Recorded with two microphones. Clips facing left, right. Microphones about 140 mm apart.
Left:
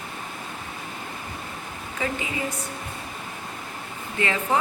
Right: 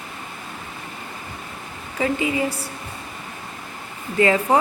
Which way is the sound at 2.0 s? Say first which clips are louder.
Right 7 dB; 25° right (ahead or behind).